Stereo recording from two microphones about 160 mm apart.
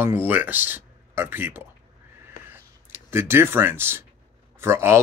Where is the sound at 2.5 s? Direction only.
15° right (ahead or behind).